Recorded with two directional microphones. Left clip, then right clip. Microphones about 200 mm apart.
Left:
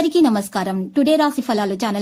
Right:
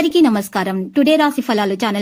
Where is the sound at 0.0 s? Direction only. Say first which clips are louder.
Right 2 dB; 15° right (ahead or behind).